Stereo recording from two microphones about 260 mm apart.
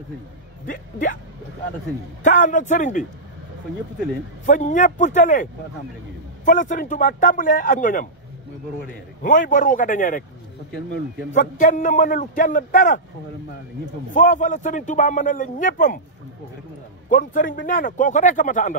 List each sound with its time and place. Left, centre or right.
0.7 s a man's voice: left
2.2 s a man's voice: left
4.5 s a man's voice: left
9.2 s a man's voice: left
11.3 s a man's voice: left
14.1 s a man's voice: left
17.1 s a man's voice: left